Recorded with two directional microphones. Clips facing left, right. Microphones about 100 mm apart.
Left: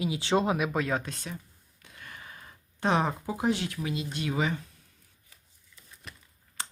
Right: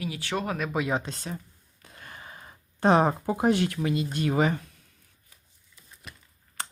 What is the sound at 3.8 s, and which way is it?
Speech, 45° right (ahead or behind).